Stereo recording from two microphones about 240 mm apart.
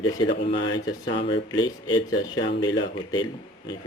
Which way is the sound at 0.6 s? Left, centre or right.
Left.